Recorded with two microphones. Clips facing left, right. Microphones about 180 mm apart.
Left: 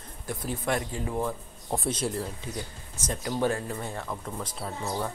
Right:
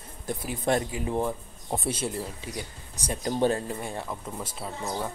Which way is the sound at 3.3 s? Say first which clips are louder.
Right 2 dB; 25° right (ahead or behind).